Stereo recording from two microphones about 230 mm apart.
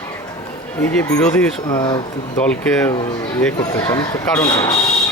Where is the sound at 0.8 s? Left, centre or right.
Centre.